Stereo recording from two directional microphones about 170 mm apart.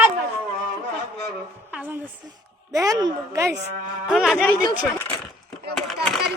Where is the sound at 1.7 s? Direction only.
10° right (ahead or behind).